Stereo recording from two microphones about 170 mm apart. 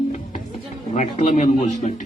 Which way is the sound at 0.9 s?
45° left (ahead or behind).